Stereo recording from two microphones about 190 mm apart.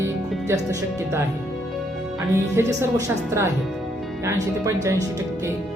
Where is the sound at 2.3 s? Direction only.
15° right (ahead or behind).